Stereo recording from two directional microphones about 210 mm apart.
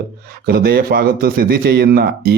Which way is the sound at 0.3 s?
45° right (ahead or behind).